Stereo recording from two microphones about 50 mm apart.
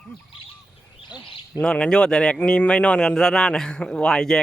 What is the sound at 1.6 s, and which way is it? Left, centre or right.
A man's voice, centre.